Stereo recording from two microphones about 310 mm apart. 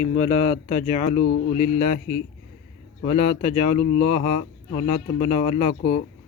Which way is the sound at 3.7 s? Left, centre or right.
Left.